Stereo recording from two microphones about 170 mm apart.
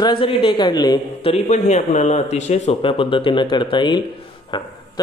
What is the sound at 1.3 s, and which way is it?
Speech, 40° left (ahead or behind).